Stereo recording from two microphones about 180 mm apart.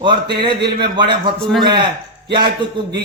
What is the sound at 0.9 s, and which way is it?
A man's voice, 25° right (ahead or behind).